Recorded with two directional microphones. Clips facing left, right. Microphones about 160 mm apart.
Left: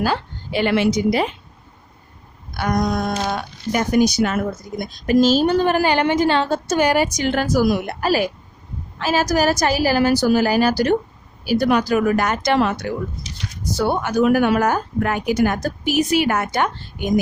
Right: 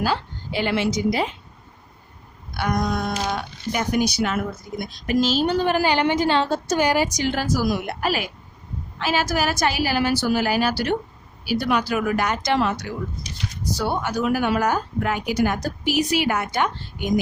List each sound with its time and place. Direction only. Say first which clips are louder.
0.0 s a woman's voice: left 2 dB; 55° left (ahead or behind)
2.6 s speech: left 3 dB; 45° left (ahead or behind)
8.0 s a woman's voice: left 6 dB; 40° left (ahead or behind)